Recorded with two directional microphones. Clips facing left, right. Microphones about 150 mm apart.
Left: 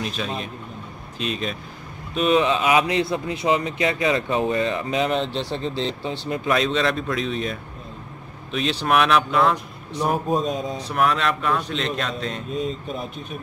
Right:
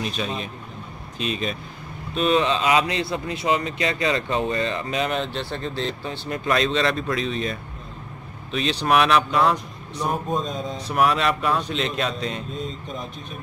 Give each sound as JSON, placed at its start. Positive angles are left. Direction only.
{"t": 0.0, "sound": "speech", "side_deg": 0}
{"t": 6.4, "sound": "speech", "side_deg": 5}
{"t": 10.9, "sound": "speech", "side_deg": -5}
{"t": 12.5, "sound": "speech", "side_deg": 10}